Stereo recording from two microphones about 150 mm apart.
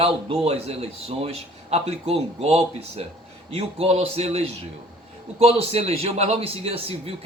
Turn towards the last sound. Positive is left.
turn(degrees=-40)  # may be behind; listen again after turning